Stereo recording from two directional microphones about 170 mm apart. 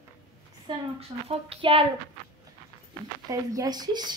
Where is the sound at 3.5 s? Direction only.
20° right (ahead or behind).